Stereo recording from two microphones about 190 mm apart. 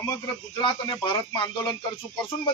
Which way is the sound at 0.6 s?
25° left (ahead or behind).